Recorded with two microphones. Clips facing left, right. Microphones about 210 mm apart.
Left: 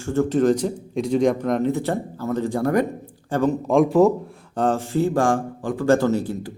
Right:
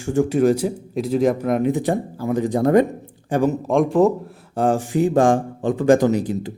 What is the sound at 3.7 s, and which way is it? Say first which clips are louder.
Speech: left 1 dB; centre (ahead or behind).